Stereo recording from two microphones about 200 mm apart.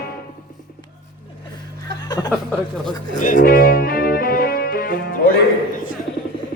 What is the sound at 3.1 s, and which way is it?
Music, 40° left (ahead or behind).